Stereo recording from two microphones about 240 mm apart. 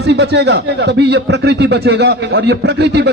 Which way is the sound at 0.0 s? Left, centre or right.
Right.